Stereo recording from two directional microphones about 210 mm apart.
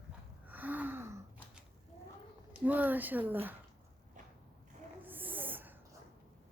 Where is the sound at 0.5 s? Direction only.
10° right (ahead or behind).